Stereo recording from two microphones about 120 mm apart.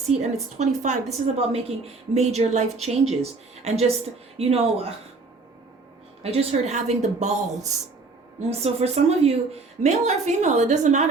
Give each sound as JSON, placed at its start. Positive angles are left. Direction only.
{"t": 0.1, "sound": "a woman's voice", "side_deg": -65}
{"t": 1.4, "sound": "a woman's voice", "side_deg": -55}
{"t": 6.3, "sound": "a woman's voice", "side_deg": -65}
{"t": 8.4, "sound": "a woman's voice", "side_deg": -60}